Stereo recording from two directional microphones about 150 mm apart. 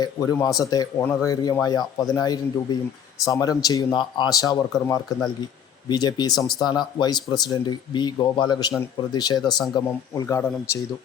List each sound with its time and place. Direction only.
0.0 s speech: 25° left (ahead or behind)